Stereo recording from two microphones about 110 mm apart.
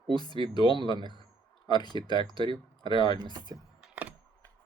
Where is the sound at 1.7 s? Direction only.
40° left (ahead or behind).